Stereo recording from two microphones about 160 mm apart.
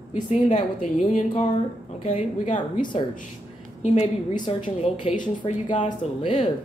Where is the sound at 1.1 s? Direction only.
40° left (ahead or behind).